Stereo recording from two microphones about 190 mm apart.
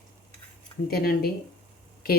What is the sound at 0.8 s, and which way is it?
Speech, 55° left (ahead or behind).